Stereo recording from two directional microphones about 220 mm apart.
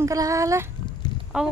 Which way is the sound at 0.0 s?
15° right (ahead or behind).